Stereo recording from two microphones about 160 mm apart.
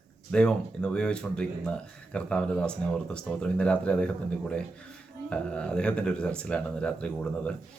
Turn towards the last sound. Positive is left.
turn(degrees=5)  # may be behind; listen again after turning